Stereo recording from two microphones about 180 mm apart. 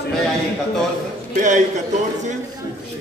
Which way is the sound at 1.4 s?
45° right (ahead or behind).